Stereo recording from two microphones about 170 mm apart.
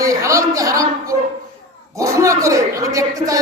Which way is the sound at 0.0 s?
20° right (ahead or behind).